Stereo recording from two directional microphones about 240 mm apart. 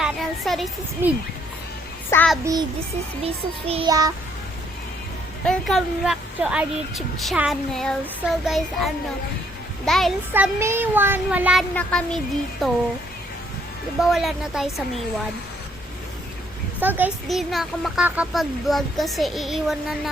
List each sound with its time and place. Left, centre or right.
0.0 s a woman's voice: centre
2.4 s a child's voice: centre
3.7 s a child's voice: centre
5.5 s a woman's voice: centre
14.0 s a woman's voice: centre
16.8 s a woman's voice: centre